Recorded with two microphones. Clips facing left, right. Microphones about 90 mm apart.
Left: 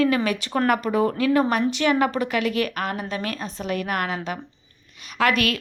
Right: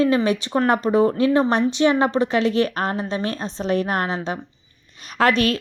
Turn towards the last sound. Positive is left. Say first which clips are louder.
# right 3 dB
turn(degrees=-30)  # may be behind; listen again after turning